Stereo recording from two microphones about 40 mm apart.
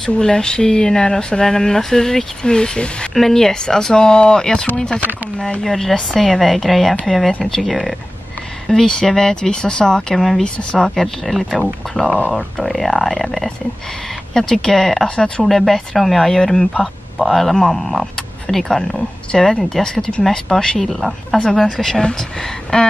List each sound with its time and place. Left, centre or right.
0.2 s speech: centre
2.4 s speech: left
3.2 s a woman's voice: centre
8.6 s speech: centre
10.1 s a woman's voice: centre
10.4 s speech: left
11.0 s a woman's voice: centre
15.0 s speech: left
15.4 s a woman's voice: centre
20.8 s a woman's voice: centre; by 22.9 s left